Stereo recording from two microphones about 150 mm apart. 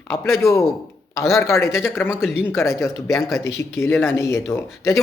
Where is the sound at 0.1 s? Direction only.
15° left (ahead or behind).